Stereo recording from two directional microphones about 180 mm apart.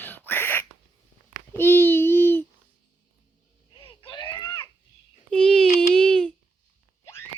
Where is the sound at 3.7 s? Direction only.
25° left (ahead or behind).